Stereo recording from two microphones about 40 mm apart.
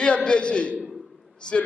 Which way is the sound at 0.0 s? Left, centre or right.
Left.